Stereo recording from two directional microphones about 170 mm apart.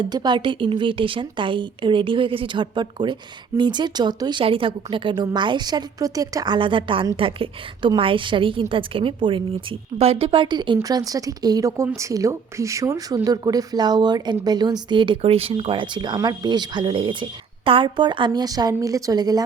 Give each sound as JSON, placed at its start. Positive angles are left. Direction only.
{"t": 0.0, "sound": "a woman's voice", "side_deg": -25}